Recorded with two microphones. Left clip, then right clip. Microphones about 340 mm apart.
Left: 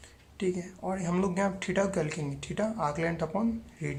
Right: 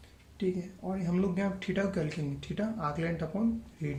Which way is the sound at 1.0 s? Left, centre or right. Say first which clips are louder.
Left 3 dB; centre.